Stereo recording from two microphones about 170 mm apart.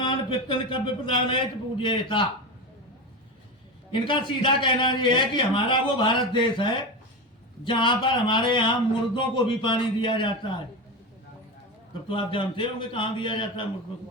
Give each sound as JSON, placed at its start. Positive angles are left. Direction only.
{"t": 0.0, "sound": "a man's voice", "side_deg": 30}
{"t": 3.9, "sound": "a man's voice", "side_deg": 30}
{"t": 12.0, "sound": "a man's voice", "side_deg": 30}